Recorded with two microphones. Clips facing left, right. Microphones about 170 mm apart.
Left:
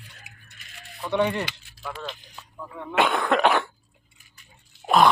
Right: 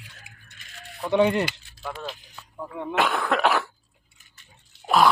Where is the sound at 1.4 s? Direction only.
5° right (ahead or behind).